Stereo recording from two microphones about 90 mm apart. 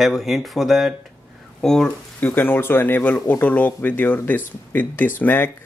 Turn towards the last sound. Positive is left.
turn(degrees=20)  # may be behind; listen again after turning